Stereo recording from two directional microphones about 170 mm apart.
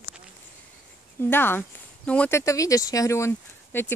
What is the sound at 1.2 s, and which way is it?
Speech, 10° left (ahead or behind).